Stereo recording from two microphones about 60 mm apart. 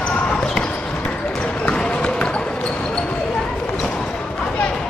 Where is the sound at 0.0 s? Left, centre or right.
Centre.